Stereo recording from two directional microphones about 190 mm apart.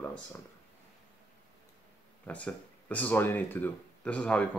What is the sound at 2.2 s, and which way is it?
Speech, 10° left (ahead or behind).